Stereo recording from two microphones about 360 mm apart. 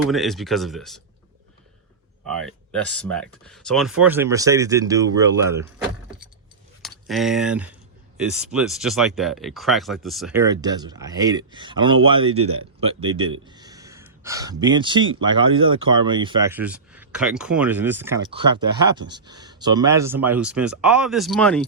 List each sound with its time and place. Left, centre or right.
0.1 s speech: centre
2.2 s speech: centre
6.8 s speech: centre
12.3 s speech: right
12.8 s speech: centre